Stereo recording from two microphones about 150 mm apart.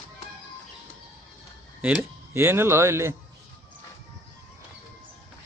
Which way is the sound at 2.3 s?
15° right (ahead or behind).